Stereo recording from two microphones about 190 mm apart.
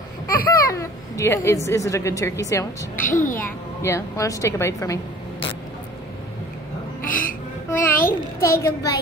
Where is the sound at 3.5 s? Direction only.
15° left (ahead or behind).